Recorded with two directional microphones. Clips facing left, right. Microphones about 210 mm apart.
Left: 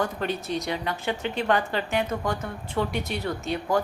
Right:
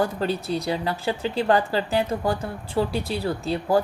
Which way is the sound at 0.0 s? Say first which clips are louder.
Right 4 dB; 30° right (ahead or behind).